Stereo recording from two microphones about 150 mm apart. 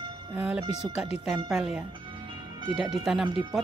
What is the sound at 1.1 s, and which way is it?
Speech, 5° right (ahead or behind).